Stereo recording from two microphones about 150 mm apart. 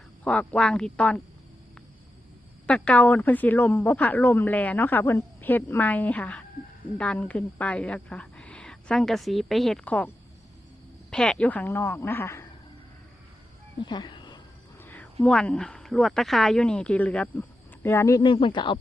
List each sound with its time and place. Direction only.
0.3 s speech: 10° left (ahead or behind)
2.6 s speech: 5° left (ahead or behind)
11.1 s speech: 5° left (ahead or behind)
13.8 s a sound: 30° left (ahead or behind)
14.8 s a sound: 10° left (ahead or behind)
15.2 s speech: 5° left (ahead or behind)
18.2 s speech: 35° left (ahead or behind)